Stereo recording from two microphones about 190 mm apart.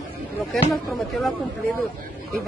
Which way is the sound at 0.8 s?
Centre (ahead or behind).